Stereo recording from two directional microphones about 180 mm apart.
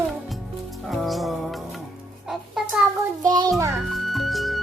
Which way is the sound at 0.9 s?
Centre (ahead or behind).